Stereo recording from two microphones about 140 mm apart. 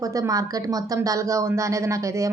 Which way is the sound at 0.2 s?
25° right (ahead or behind).